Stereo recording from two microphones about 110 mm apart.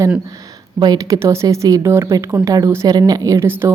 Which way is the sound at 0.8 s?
40° right (ahead or behind).